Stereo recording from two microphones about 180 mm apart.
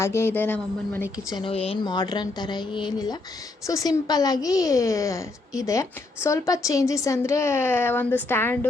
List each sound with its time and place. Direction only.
0.0 s a woman's voice: 15° left (ahead or behind)
1.3 s a woman's voice: 30° left (ahead or behind); by 8.5 s 10° left (ahead or behind)